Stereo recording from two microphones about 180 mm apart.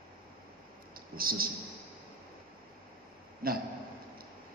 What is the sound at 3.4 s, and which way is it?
Speech, 55° right (ahead or behind).